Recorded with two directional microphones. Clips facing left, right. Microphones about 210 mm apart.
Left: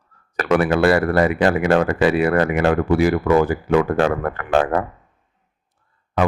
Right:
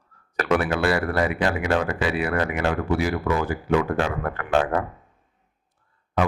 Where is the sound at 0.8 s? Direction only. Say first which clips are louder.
Left 6 dB; 45° left (ahead or behind).